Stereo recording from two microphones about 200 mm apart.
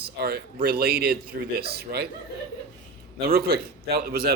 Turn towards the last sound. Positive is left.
turn(degrees=-50)  # may be behind; listen again after turning